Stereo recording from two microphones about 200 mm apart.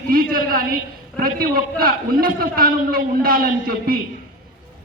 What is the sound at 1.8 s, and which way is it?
A man's voice, 45° right (ahead or behind).